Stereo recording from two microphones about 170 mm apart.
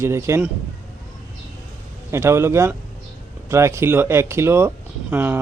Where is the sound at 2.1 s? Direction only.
15° right (ahead or behind).